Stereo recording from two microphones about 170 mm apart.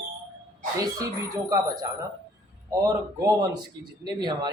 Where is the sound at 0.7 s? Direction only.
20° right (ahead or behind).